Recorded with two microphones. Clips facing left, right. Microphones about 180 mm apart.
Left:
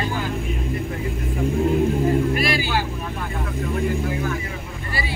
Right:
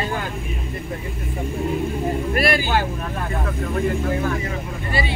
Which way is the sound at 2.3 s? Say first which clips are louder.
Right 2 dB; 55° right (ahead or behind).